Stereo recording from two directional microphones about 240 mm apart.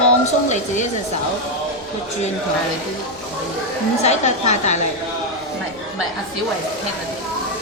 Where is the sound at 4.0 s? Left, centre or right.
Left.